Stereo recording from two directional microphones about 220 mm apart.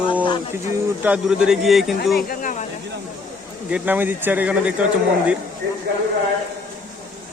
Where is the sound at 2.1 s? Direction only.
40° left (ahead or behind).